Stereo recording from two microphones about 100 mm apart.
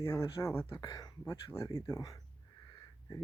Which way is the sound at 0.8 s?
40° left (ahead or behind).